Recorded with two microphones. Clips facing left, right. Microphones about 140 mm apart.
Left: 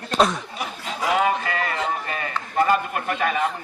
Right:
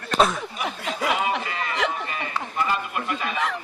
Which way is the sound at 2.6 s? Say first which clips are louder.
Left 6 dB; 50° left (ahead or behind).